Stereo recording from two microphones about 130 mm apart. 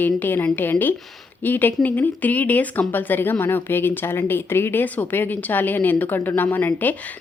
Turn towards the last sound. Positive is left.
turn(degrees=15)  # may be behind; listen again after turning